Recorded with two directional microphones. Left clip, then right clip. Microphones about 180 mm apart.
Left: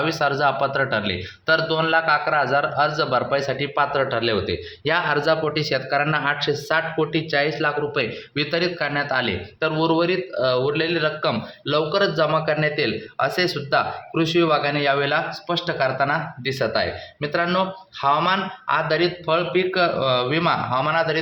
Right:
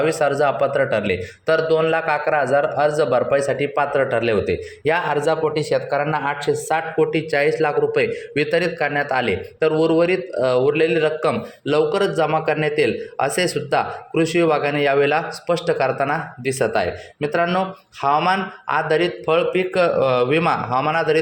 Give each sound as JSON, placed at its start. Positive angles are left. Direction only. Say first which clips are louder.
{"t": 0.0, "sound": "a man's voice", "louder": "right 3 dB", "side_deg": -10}